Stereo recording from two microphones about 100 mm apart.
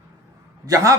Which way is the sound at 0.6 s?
35° right (ahead or behind).